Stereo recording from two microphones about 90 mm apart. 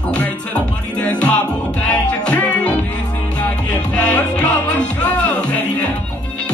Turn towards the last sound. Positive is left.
turn(degrees=15)  # may be behind; listen again after turning